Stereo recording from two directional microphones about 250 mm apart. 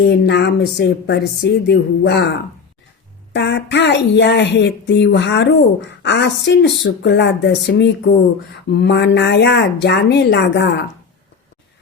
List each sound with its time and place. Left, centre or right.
0.0 s speech: left